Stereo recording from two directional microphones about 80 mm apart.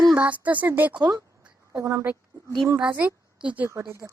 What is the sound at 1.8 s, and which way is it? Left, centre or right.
Speech, right.